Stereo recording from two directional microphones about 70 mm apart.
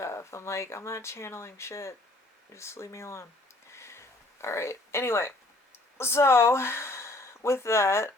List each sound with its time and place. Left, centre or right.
0.0 s speech: left
3.7 s a sound: left
5.7 s speech: left